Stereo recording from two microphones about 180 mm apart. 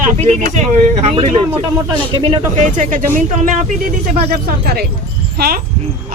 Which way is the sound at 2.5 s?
45° right (ahead or behind).